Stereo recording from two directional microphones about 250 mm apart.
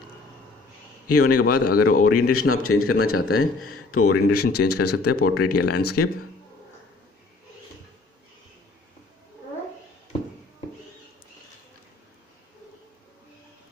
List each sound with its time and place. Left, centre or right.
1.0 s a man's voice: left